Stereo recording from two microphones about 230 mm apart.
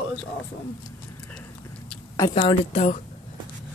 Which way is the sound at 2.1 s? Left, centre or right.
Centre.